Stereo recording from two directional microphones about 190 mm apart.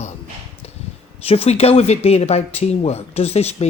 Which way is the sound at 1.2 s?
30° left (ahead or behind).